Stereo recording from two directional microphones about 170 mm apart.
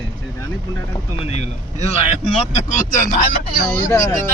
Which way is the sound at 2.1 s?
45° left (ahead or behind).